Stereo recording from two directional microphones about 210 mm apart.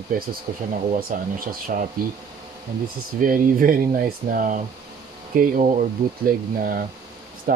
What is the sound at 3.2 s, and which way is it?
Speech, 40° right (ahead or behind).